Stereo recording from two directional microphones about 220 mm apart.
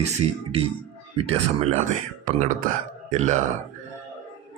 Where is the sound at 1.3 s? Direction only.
30° right (ahead or behind).